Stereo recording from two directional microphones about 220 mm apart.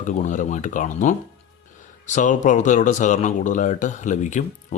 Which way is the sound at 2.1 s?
35° left (ahead or behind).